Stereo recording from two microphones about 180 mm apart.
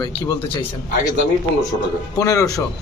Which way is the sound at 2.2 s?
20° left (ahead or behind).